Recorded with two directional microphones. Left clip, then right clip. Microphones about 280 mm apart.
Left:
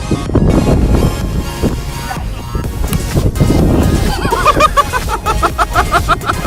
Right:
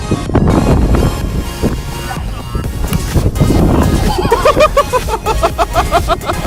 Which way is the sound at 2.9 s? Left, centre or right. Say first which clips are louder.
Even; centre.